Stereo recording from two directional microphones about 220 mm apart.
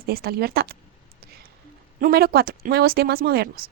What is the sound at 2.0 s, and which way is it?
A woman's voice, 45° right (ahead or behind).